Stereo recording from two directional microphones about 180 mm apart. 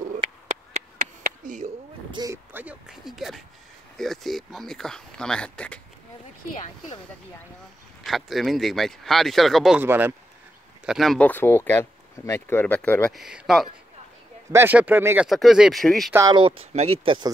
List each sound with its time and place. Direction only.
0.9 s a sound: 55° right (ahead or behind)
2.0 s a sound: 20° right (ahead or behind); by 3.4 s centre (ahead or behind)
4.0 s speech: centre (ahead or behind)
8.0 s speech: centre (ahead or behind)
9.8 s speech: 10° right (ahead or behind)
16.1 s speech: 15° right (ahead or behind)
16.3 s speech: 30° right (ahead or behind)